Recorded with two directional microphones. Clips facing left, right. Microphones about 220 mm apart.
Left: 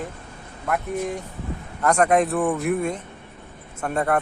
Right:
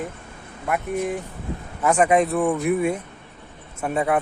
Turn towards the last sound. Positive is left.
turn(degrees=-5)  # may be behind; listen again after turning